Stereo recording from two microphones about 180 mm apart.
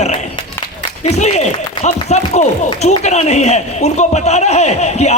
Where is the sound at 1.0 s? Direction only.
35° left (ahead or behind).